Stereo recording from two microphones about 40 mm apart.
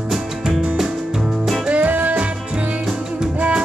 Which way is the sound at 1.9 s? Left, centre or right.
Right.